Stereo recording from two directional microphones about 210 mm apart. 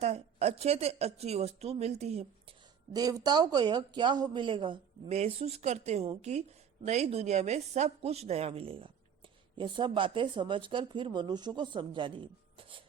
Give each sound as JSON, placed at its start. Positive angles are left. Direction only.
{"t": 0.0, "sound": "speech", "side_deg": -30}
{"t": 2.9, "sound": "speech", "side_deg": -15}